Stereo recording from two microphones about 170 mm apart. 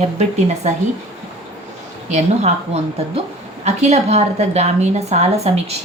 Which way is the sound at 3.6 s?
40° right (ahead or behind).